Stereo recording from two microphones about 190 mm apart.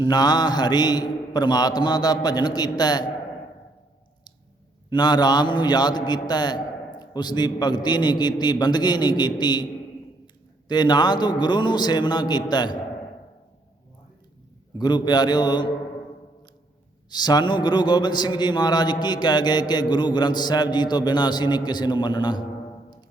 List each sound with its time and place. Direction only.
0.0 s a man's voice: 20° left (ahead or behind)
4.9 s a man's voice: 20° left (ahead or behind)
10.7 s a man's voice: 20° left (ahead or behind)
14.8 s a man's voice: 20° left (ahead or behind)
17.1 s a man's voice: 20° left (ahead or behind)